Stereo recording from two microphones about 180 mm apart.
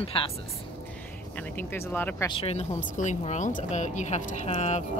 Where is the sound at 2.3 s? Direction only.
35° left (ahead or behind).